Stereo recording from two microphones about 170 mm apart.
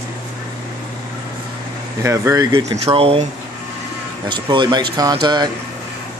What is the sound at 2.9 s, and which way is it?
Speech, 35° right (ahead or behind).